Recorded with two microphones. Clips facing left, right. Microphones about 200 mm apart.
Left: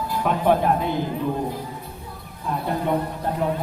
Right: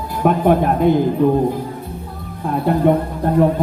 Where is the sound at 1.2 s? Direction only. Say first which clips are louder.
Right 13 dB; 60° right (ahead or behind).